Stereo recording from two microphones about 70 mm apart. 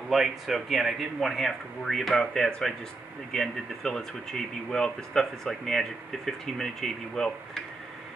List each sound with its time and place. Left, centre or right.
0.1 s speech: centre